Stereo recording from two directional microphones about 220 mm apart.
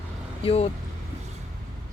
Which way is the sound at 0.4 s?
25° left (ahead or behind).